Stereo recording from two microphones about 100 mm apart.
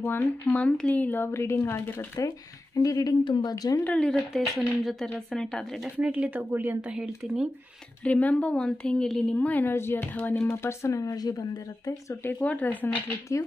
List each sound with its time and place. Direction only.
0.0 s speech: 20° left (ahead or behind)
2.1 s speech: 35° left (ahead or behind)
3.9 s a woman's voice: 10° left (ahead or behind)
5.9 s a woman's voice: 15° right (ahead or behind)
6.9 s a woman's voice: 10° right (ahead or behind)
8.0 s a woman's voice: 15° left (ahead or behind); by 12.2 s 40° left (ahead or behind)
12.2 s speech: 20° left (ahead or behind)